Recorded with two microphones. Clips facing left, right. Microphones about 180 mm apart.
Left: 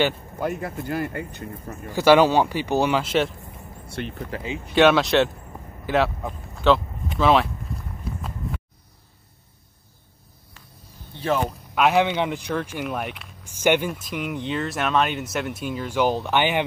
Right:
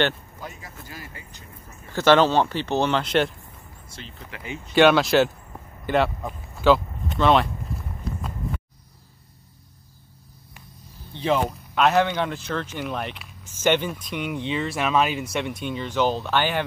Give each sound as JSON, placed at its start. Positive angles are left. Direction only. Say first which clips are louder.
{"t": 0.4, "sound": "speech", "louder": "left 12 dB", "side_deg": 60}
{"t": 1.9, "sound": "speech", "louder": "left 2 dB", "side_deg": 10}
{"t": 3.8, "sound": "speech", "louder": "left 12 dB", "side_deg": 60}
{"t": 4.7, "sound": "speech", "louder": "even", "side_deg": 0}
{"t": 11.7, "sound": "speech", "louder": "left 1 dB", "side_deg": 10}